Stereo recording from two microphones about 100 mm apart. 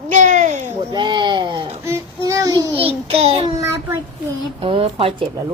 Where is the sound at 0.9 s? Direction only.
50° right (ahead or behind).